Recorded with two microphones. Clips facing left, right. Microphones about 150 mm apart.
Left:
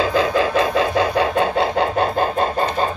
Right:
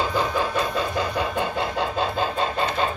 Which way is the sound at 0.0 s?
90° left.